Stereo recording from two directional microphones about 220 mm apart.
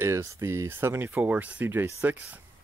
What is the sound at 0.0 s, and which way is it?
Speech, 15° right (ahead or behind).